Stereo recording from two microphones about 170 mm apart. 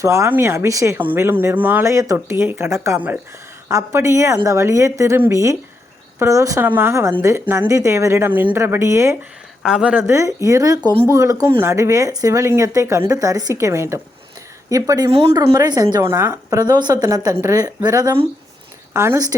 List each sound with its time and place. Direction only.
0.0 s a woman's voice: 15° right (ahead or behind)
9.6 s a woman's voice: 5° right (ahead or behind)